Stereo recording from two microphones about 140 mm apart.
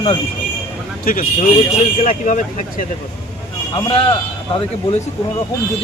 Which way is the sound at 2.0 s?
65° left (ahead or behind).